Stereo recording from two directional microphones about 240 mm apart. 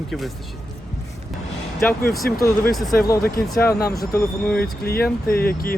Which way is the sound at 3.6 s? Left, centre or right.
Left.